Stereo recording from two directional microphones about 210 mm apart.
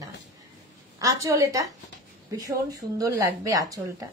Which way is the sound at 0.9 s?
15° right (ahead or behind).